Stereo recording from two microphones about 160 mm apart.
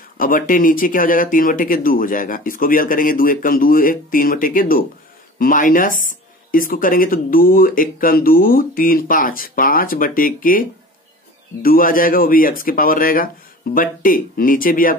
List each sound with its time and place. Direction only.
0.2 s speech: 60° left (ahead or behind)